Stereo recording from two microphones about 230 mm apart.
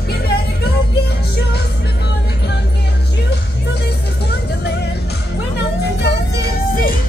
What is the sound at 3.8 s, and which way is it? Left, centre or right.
Music, left.